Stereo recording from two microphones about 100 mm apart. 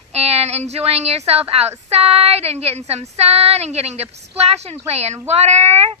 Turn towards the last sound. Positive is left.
turn(degrees=-90)